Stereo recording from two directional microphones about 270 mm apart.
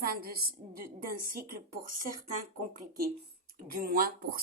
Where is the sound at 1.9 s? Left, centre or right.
Right.